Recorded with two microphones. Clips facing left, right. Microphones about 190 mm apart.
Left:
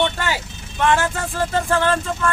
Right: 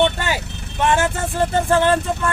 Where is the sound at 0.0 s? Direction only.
20° right (ahead or behind).